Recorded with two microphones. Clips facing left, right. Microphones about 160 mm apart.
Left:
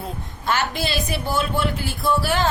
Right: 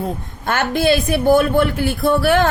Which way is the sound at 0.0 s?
55° right (ahead or behind).